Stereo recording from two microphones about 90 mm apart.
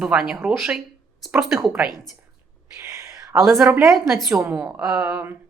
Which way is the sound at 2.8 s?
35° right (ahead or behind).